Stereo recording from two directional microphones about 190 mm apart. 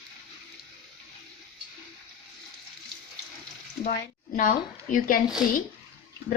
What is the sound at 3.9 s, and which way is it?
A woman's voice, 45° left (ahead or behind).